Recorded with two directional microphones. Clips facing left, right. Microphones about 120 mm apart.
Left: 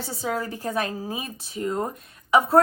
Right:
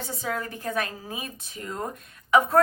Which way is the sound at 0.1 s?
30° left (ahead or behind).